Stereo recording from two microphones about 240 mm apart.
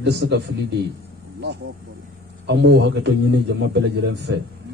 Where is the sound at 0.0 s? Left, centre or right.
Right.